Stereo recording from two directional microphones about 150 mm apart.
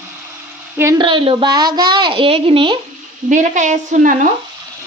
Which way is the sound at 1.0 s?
35° right (ahead or behind).